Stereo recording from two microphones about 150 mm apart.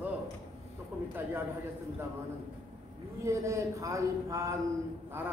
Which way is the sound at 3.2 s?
20° right (ahead or behind).